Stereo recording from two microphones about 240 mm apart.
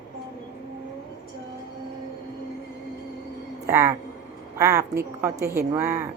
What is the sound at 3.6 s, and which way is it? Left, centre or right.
A woman's voice, centre.